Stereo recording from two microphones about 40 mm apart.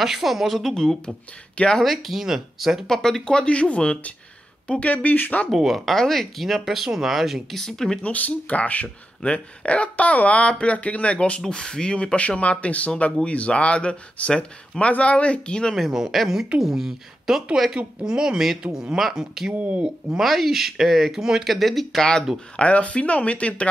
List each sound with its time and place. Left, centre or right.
0.0 s speech: centre
1.8 s speech: centre
2.9 s speech: centre
3.4 s speech: left
4.6 s speech: left
5.5 s speech: centre
7.5 s speech: centre
8.0 s speech: left
9.2 s speech: left
11.4 s speech: centre
15.7 s speech: centre
18.0 s speech: centre
21.5 s speech: centre
22.6 s speech: left